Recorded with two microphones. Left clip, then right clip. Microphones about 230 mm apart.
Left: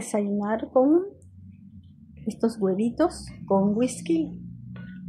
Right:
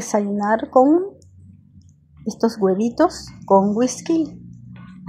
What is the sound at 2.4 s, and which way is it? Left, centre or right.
A woman's voice, centre.